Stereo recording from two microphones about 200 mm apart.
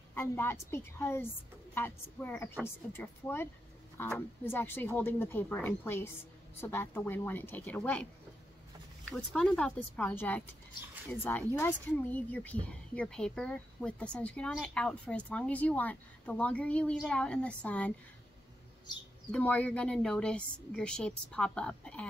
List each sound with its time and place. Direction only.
0.1 s a woman's voice: 10° left (ahead or behind)
11.5 s speech: 10° left (ahead or behind)
19.3 s speech: 5° left (ahead or behind)